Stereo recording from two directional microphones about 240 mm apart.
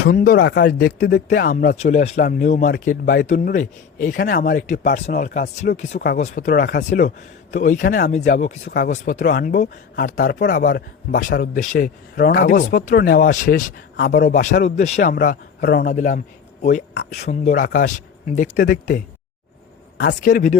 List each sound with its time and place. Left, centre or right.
0.1 s speech: left